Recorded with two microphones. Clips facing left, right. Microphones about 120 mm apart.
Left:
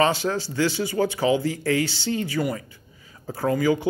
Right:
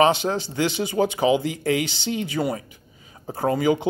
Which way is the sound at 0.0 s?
20° right (ahead or behind).